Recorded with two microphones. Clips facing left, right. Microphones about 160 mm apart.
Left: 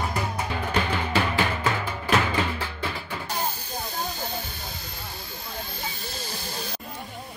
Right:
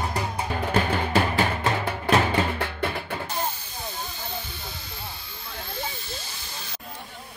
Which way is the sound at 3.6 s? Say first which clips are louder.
Left 3 dB; 40° left (ahead or behind).